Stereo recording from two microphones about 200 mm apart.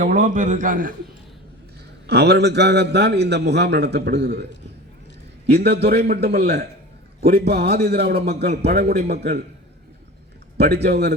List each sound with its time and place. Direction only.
0.0 s a man's voice: 40° right (ahead or behind)
2.0 s a man's voice: 55° right (ahead or behind)
5.5 s a man's voice: 55° right (ahead or behind)
10.6 s a man's voice: 55° right (ahead or behind)